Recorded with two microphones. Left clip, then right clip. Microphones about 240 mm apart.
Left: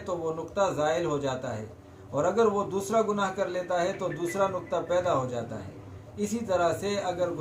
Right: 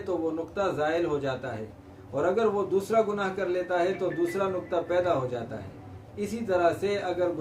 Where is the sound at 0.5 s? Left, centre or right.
Centre.